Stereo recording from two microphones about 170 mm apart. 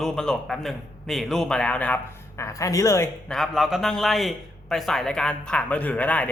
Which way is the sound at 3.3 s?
Centre (ahead or behind).